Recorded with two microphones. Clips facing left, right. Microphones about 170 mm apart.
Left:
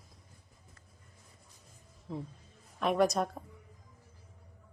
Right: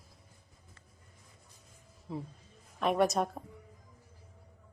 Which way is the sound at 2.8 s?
Centre (ahead or behind).